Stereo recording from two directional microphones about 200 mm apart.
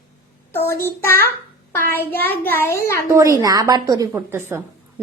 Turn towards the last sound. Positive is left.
turn(degrees=-10)  # may be behind; listen again after turning